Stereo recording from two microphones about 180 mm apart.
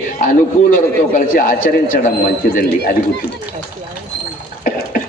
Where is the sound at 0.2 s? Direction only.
50° left (ahead or behind).